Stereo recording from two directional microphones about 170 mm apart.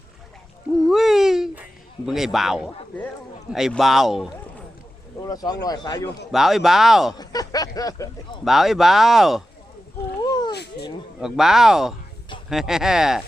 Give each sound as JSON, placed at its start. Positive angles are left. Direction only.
{"t": 0.9, "sound": "babbling", "side_deg": 0}
{"t": 2.0, "sound": "speech", "side_deg": 0}
{"t": 5.2, "sound": "speech", "side_deg": 20}
{"t": 5.6, "sound": "a sound", "side_deg": 25}
{"t": 6.3, "sound": "speech", "side_deg": 0}
{"t": 7.2, "sound": "a sound", "side_deg": 20}
{"t": 8.4, "sound": "speech", "side_deg": 0}
{"t": 10.2, "sound": "a sound", "side_deg": 25}
{"t": 10.5, "sound": "speech", "side_deg": 75}
{"t": 11.2, "sound": "speech", "side_deg": -5}